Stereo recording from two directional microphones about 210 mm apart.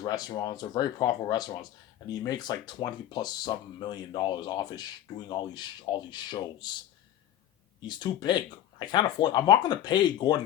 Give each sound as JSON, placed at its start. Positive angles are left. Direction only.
{"t": 0.0, "sound": "speech", "side_deg": 20}
{"t": 7.9, "sound": "speech", "side_deg": 20}